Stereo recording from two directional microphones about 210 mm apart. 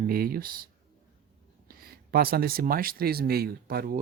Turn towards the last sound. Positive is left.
turn(degrees=-45)  # may be behind; listen again after turning